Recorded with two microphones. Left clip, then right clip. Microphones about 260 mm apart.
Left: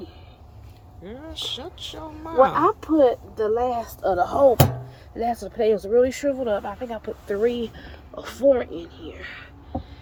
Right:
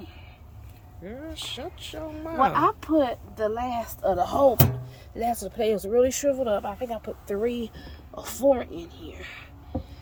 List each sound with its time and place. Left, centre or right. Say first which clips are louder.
1.0 s speech: left 4 dB; centre
3.8 s speech: left 2 dB; right
4.2 s speech: left 4 dB; right